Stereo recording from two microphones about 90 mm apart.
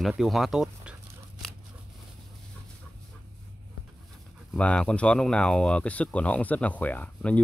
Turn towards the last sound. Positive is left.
turn(degrees=15)  # may be behind; listen again after turning